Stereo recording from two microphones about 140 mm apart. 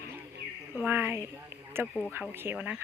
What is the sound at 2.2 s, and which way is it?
Speech, 15° right (ahead or behind).